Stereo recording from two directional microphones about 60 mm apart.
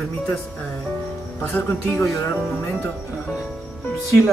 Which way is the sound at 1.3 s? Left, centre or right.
Left.